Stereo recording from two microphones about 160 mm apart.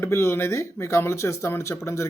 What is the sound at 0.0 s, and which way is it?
Speech, 15° left (ahead or behind).